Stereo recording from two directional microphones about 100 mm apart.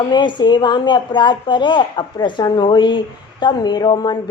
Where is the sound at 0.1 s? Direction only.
50° left (ahead or behind).